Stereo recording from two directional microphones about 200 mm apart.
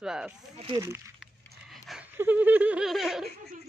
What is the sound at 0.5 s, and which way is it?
Snake, 25° right (ahead or behind).